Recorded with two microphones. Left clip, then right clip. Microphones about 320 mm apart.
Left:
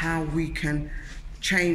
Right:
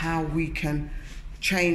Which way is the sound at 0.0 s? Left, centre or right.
Centre.